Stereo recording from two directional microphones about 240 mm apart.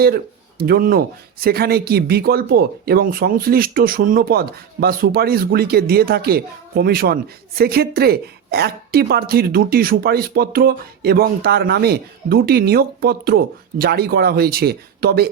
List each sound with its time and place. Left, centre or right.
0.6 s speech: right